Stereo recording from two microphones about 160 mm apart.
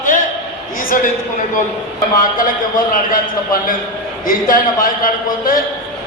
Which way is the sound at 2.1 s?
60° left (ahead or behind).